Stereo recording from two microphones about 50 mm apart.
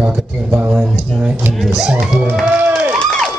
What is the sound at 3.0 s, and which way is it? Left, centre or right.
Emergency vehicle, centre.